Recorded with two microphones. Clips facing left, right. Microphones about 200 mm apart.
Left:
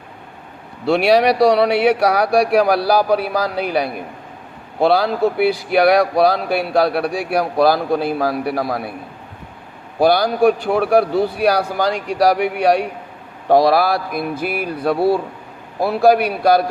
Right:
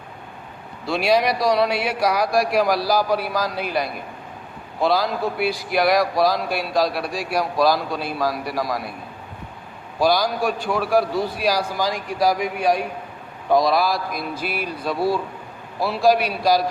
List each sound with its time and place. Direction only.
0.9 s speech: 70° left (ahead or behind)
10.0 s speech: 60° left (ahead or behind)